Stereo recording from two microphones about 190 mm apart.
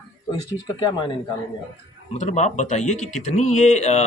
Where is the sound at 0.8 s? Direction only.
20° left (ahead or behind).